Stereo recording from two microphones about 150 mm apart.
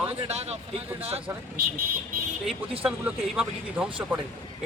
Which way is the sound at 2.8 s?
10° right (ahead or behind).